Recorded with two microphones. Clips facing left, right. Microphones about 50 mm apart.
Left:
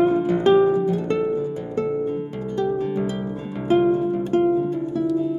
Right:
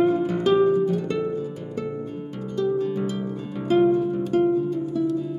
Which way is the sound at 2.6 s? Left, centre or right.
Left.